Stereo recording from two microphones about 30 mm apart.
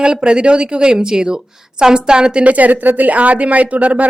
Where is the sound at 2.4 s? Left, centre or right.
Right.